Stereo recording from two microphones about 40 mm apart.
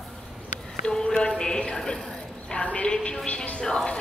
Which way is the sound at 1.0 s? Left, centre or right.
Left.